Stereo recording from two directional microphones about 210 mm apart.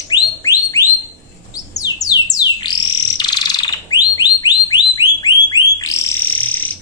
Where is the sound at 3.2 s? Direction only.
20° left (ahead or behind).